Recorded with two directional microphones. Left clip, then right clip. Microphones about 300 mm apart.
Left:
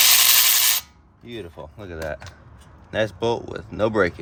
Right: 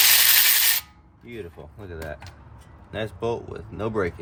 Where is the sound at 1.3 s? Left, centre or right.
Left.